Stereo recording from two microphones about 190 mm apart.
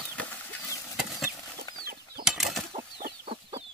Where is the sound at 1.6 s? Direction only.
50° right (ahead or behind).